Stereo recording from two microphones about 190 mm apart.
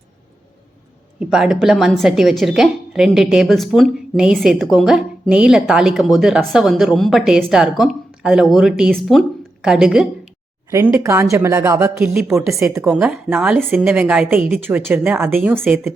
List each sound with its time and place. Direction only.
1.2 s a woman's voice: 5° right (ahead or behind)
10.7 s a woman's voice: 15° right (ahead or behind)